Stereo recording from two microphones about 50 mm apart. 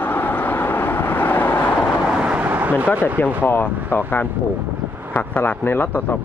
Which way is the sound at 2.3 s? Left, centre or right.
Right.